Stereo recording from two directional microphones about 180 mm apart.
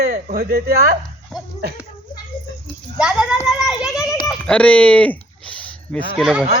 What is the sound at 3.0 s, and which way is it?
Speech, 5° right (ahead or behind).